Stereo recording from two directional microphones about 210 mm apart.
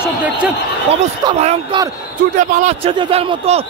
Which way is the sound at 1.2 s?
25° right (ahead or behind).